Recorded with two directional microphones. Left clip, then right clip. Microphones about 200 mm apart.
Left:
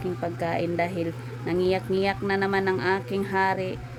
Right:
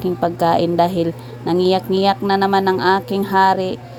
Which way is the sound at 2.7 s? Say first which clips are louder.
Right 9 dB; centre (ahead or behind).